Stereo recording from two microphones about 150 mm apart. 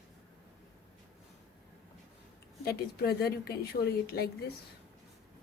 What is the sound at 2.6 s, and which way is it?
A woman's voice, 90° left.